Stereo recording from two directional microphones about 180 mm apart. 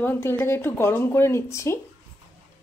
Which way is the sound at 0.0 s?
15° left (ahead or behind).